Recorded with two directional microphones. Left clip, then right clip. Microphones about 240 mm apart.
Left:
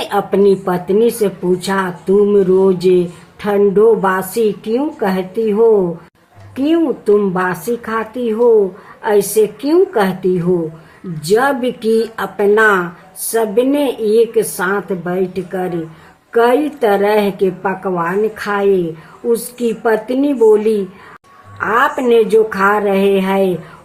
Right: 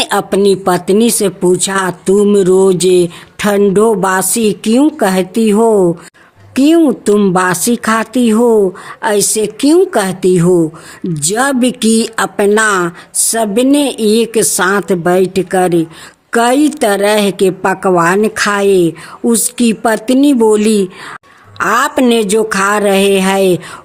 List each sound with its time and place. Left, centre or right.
0.0 s speech: right